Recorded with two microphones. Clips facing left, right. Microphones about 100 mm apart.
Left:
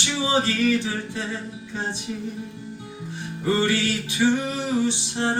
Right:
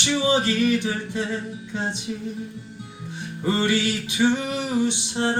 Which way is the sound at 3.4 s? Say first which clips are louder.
Even; 20° right (ahead or behind).